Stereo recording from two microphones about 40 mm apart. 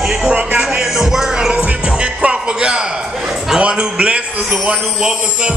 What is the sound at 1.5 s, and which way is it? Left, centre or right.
Music, right.